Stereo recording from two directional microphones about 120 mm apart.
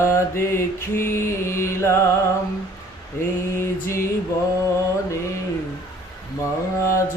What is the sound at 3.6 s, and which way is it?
Mantra, 20° left (ahead or behind).